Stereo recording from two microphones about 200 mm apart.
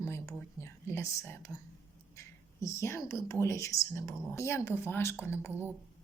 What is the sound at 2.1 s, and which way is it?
Speech, 15° left (ahead or behind).